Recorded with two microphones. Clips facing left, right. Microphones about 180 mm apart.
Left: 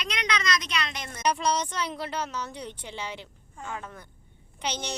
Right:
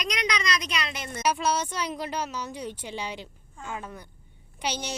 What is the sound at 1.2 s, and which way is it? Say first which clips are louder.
A woman's voice: even; 5° right (ahead or behind).